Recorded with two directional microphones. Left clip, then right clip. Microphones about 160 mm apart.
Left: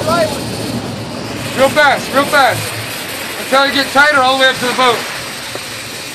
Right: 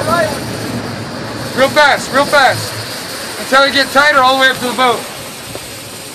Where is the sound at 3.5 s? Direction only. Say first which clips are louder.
Right 1 dB; 60° right (ahead or behind).